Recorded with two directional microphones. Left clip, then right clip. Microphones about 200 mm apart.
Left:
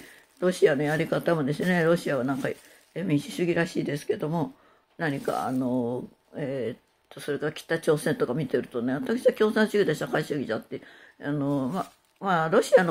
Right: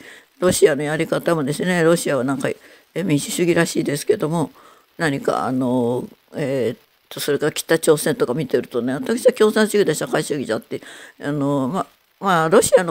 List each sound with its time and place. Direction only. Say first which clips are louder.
0.4 s speech: right 7 dB; 50° right (ahead or behind)